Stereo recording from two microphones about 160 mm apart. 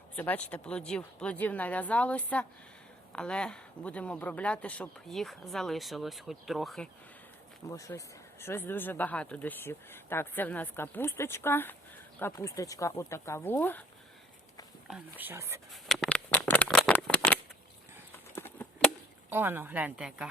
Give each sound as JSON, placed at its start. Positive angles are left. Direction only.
{"t": 0.2, "sound": "speech", "side_deg": 10}
{"t": 7.7, "sound": "speech", "side_deg": 20}
{"t": 15.2, "sound": "a woman's voice", "side_deg": -15}
{"t": 15.7, "sound": "shuffling cards", "side_deg": 5}
{"t": 18.1, "sound": "a sound", "side_deg": 10}
{"t": 19.3, "sound": "a woman's voice", "side_deg": -15}